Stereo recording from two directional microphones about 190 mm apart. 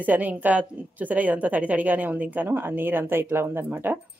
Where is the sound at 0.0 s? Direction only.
10° right (ahead or behind).